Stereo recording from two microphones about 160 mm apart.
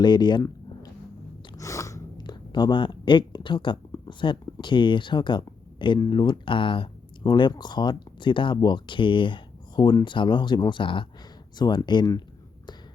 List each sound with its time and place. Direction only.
0.0 s speech: 25° left (ahead or behind)
1.5 s a sound: 20° left (ahead or behind)
3.9 s speech: 30° left (ahead or behind)